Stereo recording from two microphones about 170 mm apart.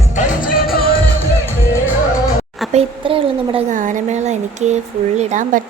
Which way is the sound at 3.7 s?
50° right (ahead or behind).